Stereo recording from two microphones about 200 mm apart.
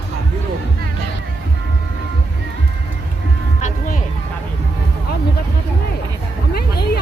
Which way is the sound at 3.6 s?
40° left (ahead or behind).